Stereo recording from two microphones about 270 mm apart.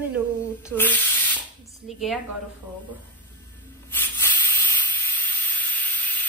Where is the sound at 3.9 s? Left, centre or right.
Centre.